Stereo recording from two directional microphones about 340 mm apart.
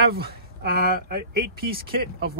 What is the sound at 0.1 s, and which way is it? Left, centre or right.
Speech, right.